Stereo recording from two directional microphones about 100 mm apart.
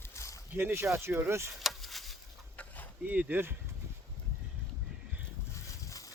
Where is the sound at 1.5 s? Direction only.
Centre (ahead or behind).